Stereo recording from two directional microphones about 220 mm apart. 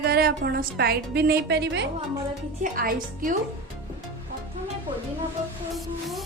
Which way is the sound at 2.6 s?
40° right (ahead or behind).